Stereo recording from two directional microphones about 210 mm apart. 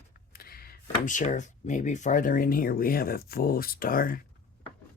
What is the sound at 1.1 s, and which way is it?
Speech, 35° left (ahead or behind).